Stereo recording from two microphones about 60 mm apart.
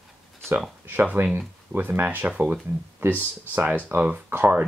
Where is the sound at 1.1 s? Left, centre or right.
Right.